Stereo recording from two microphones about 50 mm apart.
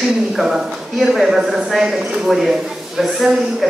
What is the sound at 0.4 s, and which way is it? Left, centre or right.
Speech, centre.